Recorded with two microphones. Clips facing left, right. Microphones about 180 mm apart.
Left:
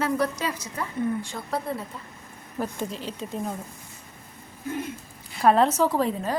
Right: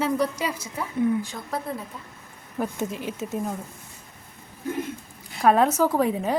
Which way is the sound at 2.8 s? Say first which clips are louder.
Right 3 dB; 15° right (ahead or behind).